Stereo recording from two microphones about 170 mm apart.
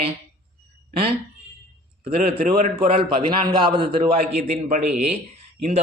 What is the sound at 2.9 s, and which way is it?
A man's voice, 30° right (ahead or behind).